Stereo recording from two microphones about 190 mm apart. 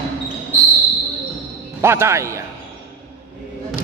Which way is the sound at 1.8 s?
15° right (ahead or behind).